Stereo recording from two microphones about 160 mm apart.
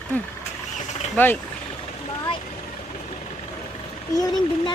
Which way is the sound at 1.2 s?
10° left (ahead or behind).